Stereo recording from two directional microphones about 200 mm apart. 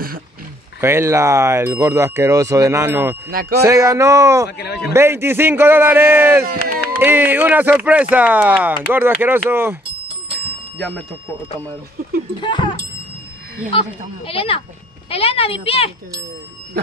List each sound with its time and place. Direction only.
0.7 s speech: 10° right (ahead or behind)
3.3 s speech: 45° right (ahead or behind)
3.6 s speech: 15° right (ahead or behind)
4.5 s a man's voice: 55° left (ahead or behind)
4.9 s speech: 10° right (ahead or behind)
6.4 s speech: 45° right (ahead or behind)
7.0 s speech: 10° right (ahead or behind)
12.4 s speech: 25° left (ahead or behind)